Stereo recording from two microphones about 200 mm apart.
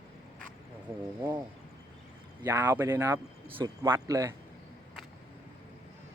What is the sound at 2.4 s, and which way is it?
Speech, 15° right (ahead or behind).